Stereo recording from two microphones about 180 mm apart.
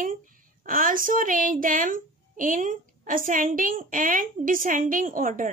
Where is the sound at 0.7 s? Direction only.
50° right (ahead or behind).